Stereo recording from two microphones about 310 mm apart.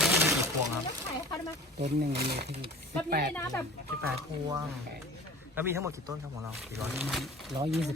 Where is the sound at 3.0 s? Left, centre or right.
Right.